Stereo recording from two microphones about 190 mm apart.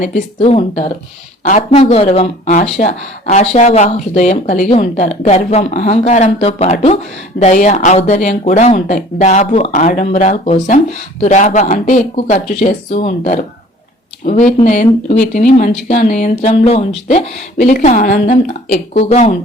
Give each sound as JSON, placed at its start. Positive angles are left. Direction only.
{"t": 0.3, "sound": "a woman's voice", "side_deg": 30}
{"t": 17.6, "sound": "speech", "side_deg": 45}